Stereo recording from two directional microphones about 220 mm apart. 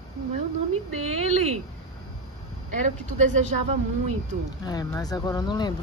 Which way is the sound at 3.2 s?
35° right (ahead or behind).